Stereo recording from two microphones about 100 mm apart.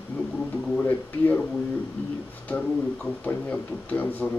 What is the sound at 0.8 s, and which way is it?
Speech, 15° left (ahead or behind).